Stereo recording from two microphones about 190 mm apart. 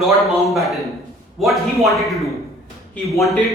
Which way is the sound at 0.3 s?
Centre (ahead or behind).